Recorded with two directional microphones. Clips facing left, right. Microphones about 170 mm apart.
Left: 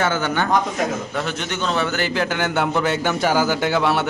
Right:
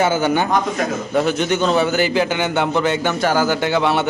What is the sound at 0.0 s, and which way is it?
A man's voice, 15° right (ahead or behind).